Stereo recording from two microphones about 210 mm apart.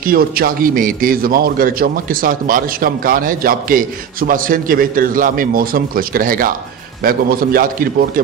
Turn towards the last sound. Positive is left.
turn(degrees=-45)  # may be behind; listen again after turning